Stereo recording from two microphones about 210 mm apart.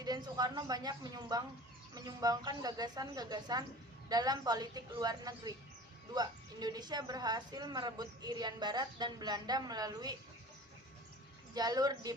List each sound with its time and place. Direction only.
0.0 s a woman's voice: 20° right (ahead or behind)
11.5 s a woman's voice: 20° right (ahead or behind)